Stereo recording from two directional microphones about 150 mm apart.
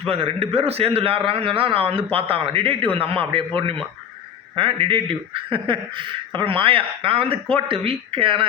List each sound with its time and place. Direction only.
0.0 s speech: 40° right (ahead or behind)